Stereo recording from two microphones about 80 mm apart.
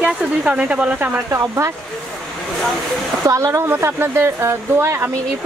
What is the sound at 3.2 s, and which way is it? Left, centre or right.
Speech, right.